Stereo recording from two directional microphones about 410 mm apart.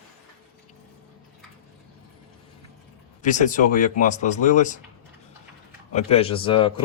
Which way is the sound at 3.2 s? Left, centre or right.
Centre.